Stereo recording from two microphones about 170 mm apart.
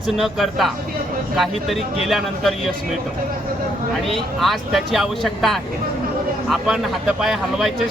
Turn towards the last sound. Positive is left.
turn(degrees=0)  # may be behind; listen again after turning